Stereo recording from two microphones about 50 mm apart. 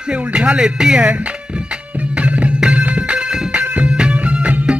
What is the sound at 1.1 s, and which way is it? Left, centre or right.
Music, right.